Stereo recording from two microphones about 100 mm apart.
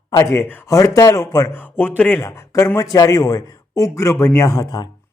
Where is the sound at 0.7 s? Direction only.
35° left (ahead or behind).